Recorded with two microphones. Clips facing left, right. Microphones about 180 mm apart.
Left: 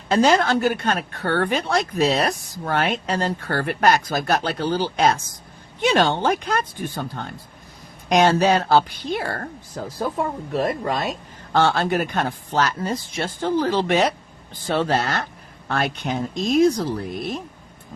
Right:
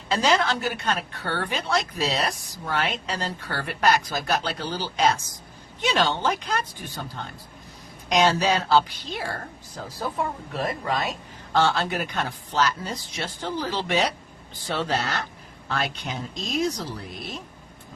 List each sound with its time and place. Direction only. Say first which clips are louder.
0.1 s a woman's voice: left 5 dB; 50° left (ahead or behind)
8.1 s a woman's voice: left 4 dB; 50° left (ahead or behind)
10.5 s a woman's voice: left 6 dB; 45° left (ahead or behind)